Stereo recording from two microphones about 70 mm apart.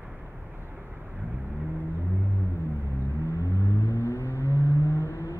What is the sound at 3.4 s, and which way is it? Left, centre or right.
Vehicle, left.